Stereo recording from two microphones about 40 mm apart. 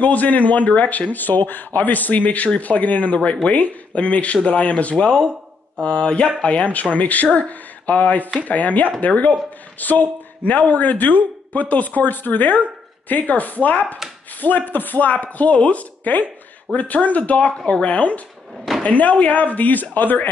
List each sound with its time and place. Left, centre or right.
0.0 s speech: left
5.8 s mantra: left
6.4 s speech: left
17.6 s mantra: left
17.8 s speech: left